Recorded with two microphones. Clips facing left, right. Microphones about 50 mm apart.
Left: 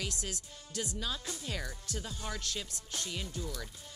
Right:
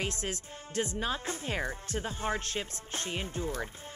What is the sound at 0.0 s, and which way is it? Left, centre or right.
Speech, right.